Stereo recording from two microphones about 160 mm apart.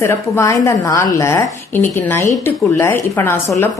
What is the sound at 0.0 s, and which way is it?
A woman's voice, 15° left (ahead or behind).